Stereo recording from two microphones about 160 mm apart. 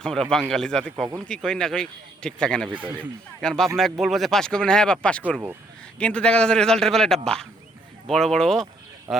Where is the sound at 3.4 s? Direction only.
Centre (ahead or behind).